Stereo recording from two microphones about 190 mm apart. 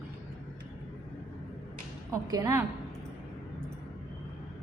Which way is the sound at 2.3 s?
20° right (ahead or behind).